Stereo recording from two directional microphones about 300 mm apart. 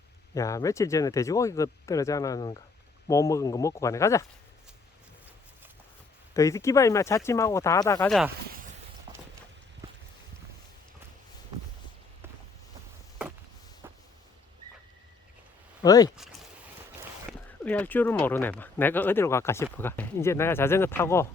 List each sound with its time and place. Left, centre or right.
0.3 s speech: centre
6.3 s speech: centre
9.1 s clip-clop: centre
13.8 s a sound: centre
15.8 s speech: centre
17.6 s speech: centre